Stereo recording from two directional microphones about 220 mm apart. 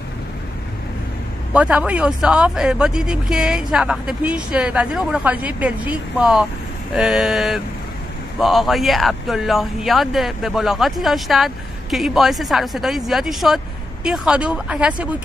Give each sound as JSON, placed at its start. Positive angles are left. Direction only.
{"t": 1.5, "sound": "speech", "side_deg": -5}